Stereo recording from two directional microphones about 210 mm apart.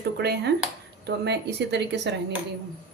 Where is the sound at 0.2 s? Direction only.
50° right (ahead or behind).